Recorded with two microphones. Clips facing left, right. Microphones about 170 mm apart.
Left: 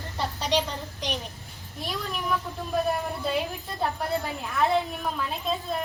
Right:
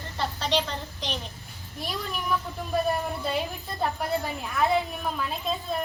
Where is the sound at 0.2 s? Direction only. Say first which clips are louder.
Even; 15° left (ahead or behind).